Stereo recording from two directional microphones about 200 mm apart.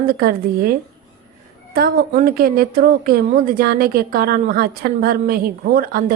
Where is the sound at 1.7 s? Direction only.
50° right (ahead or behind).